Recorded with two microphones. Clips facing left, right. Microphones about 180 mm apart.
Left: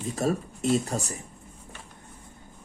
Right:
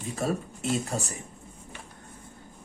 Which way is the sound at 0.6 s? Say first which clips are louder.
Left 4 dB; 35° left (ahead or behind).